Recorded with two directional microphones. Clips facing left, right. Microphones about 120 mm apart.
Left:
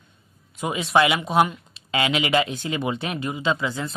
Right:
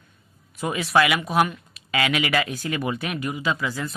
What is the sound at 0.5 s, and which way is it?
Speech, 20° left (ahead or behind).